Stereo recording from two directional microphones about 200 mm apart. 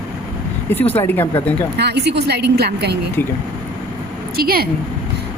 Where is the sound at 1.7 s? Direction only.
55° right (ahead or behind).